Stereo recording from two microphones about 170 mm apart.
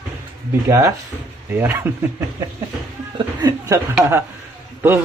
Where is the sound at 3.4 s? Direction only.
20° right (ahead or behind).